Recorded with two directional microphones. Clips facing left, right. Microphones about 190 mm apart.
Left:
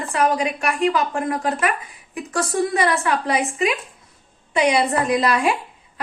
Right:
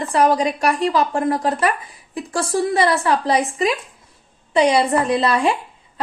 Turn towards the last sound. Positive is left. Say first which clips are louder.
# right 1 dB
turn(degrees=-30)  # may be behind; listen again after turning